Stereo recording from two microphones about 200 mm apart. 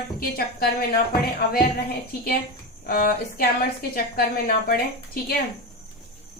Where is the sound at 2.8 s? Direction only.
45° left (ahead or behind).